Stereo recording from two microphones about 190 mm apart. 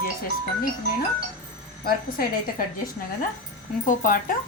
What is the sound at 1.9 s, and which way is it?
Speech, 50° left (ahead or behind).